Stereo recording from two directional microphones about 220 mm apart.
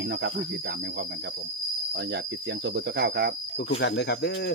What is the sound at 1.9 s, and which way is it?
Speech, 50° right (ahead or behind).